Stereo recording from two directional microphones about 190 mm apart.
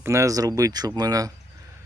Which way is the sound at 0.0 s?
15° right (ahead or behind).